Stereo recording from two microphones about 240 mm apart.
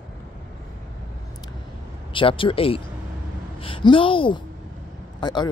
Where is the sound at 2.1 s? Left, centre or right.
Left.